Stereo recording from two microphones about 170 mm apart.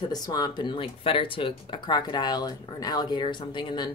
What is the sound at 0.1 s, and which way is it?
Speech, 25° left (ahead or behind).